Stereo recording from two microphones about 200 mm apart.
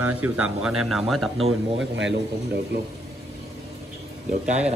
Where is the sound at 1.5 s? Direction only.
70° right (ahead or behind).